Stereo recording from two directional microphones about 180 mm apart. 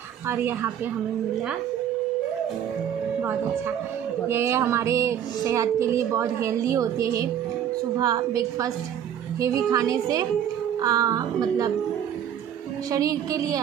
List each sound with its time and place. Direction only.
0.3 s a woman's voice: 15° right (ahead or behind)
3.2 s a woman's voice: 10° right (ahead or behind)
12.9 s speech: 20° right (ahead or behind)